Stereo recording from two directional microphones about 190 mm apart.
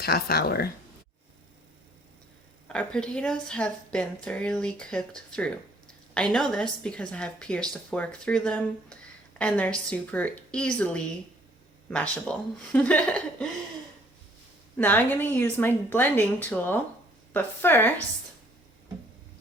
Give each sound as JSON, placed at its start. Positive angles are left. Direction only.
{"t": 0.0, "sound": "speech", "side_deg": 55}
{"t": 2.7, "sound": "a woman's voice", "side_deg": 5}
{"t": 14.8, "sound": "a woman's voice", "side_deg": 10}